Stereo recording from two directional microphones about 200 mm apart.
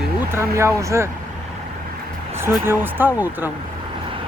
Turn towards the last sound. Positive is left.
turn(degrees=-10)  # may be behind; listen again after turning